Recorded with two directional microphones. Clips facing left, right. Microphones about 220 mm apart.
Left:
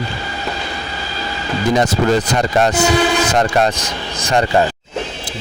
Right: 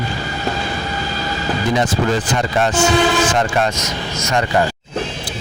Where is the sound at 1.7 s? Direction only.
40° left (ahead or behind).